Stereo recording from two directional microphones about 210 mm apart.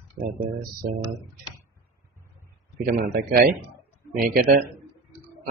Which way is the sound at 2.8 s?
45° right (ahead or behind).